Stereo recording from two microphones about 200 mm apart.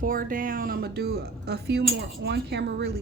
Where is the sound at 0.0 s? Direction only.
45° right (ahead or behind).